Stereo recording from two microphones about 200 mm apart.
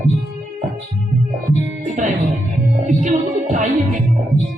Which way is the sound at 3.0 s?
40° right (ahead or behind).